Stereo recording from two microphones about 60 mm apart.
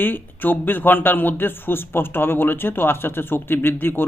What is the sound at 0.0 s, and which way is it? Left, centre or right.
Speech, left.